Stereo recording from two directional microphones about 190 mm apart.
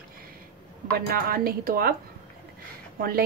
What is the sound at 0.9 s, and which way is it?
A woman's voice, 50° right (ahead or behind).